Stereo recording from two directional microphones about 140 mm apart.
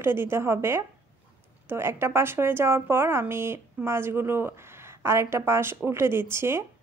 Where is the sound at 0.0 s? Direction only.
20° right (ahead or behind).